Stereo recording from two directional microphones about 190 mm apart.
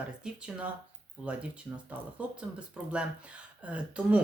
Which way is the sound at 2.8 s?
5° right (ahead or behind).